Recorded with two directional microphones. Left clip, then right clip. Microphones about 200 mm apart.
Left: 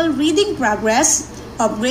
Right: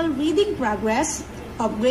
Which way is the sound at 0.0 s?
15° left (ahead or behind).